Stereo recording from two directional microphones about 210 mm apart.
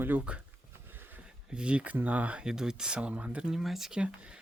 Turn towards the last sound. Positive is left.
turn(degrees=-5)  # may be behind; listen again after turning